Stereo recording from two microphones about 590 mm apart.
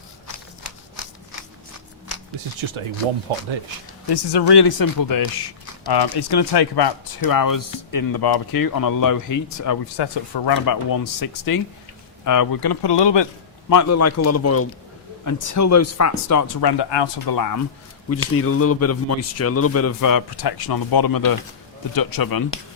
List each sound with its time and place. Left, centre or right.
2.6 s speech: right
4.1 s speech: left
10.0 s speech: left
13.7 s a man's voice: left
18.1 s a man's voice: left